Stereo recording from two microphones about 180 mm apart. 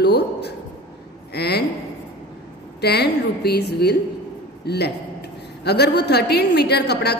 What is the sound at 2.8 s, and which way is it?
A woman's voice, 65° left (ahead or behind).